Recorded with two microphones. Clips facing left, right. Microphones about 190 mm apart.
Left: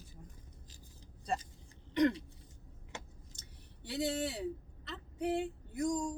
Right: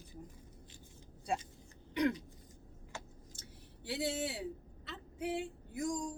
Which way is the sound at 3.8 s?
5° right (ahead or behind).